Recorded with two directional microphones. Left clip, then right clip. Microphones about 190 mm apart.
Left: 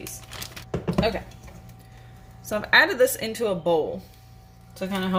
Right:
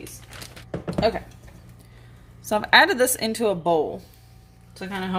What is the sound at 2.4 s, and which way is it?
A woman's voice, 50° right (ahead or behind).